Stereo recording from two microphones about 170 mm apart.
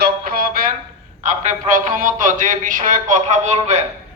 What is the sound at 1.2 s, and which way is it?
A man's voice, 45° right (ahead or behind).